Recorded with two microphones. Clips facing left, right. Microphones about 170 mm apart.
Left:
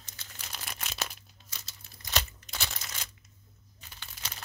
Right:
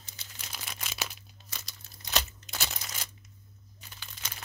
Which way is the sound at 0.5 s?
5° right (ahead or behind).